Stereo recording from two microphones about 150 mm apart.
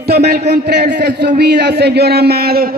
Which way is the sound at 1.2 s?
90° right.